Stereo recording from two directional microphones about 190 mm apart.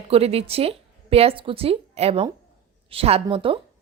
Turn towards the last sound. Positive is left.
turn(degrees=-30)  # may be behind; listen again after turning